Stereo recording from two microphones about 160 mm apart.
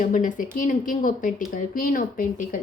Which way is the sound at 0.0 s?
55° left (ahead or behind).